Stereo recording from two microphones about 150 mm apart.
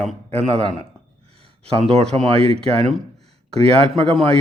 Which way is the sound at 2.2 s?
40° right (ahead or behind).